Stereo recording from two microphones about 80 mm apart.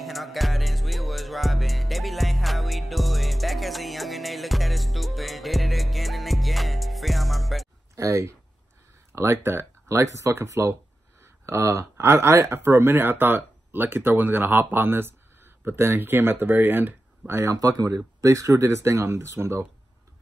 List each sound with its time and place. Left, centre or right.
0.0 s music: centre
7.9 s a sound: right
9.1 s speech: right
17.6 s speech: right